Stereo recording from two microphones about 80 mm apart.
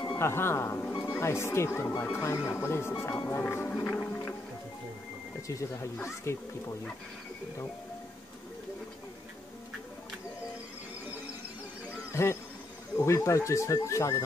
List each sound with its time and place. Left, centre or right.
0.2 s speech: left
3.3 s music: left
4.0 s music: left
5.5 s speech: left
12.1 s speech: left